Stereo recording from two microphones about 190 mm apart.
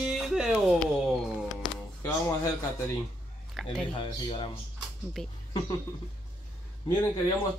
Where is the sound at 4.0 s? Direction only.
25° left (ahead or behind).